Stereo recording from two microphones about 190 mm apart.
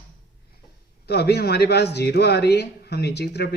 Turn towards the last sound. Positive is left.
turn(degrees=60)  # may be behind; listen again after turning